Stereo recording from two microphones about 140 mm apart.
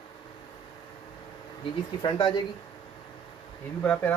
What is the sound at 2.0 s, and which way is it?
Speech, 35° left (ahead or behind).